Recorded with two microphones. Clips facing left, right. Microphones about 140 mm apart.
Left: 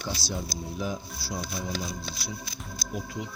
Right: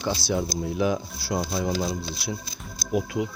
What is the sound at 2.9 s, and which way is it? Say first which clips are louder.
Speech: right 10 dB; 75° right (ahead or behind).